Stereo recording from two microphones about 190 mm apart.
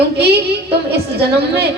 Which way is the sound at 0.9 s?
60° right (ahead or behind).